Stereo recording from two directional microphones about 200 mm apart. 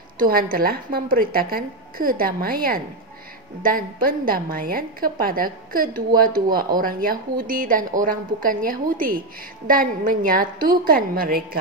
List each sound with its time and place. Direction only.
0.2 s a woman's voice: 45° right (ahead or behind)